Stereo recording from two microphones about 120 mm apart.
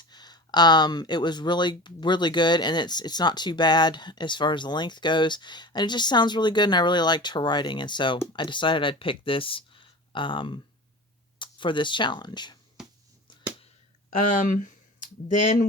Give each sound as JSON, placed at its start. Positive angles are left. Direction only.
{"t": 0.1, "sound": "speech", "side_deg": 35}
{"t": 12.8, "sound": "a sound", "side_deg": -5}
{"t": 14.1, "sound": "speech", "side_deg": 90}